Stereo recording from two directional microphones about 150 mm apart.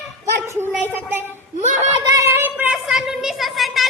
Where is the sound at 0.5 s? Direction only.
15° right (ahead or behind).